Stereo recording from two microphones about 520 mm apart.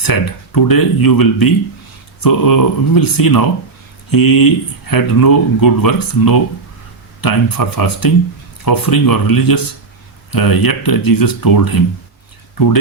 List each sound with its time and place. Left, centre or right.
0.0 s speech: left